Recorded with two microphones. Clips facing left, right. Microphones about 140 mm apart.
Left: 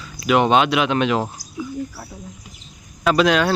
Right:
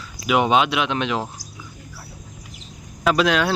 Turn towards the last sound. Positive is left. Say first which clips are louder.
# left 2 dB
turn(degrees=0)  # may be behind; listen again after turning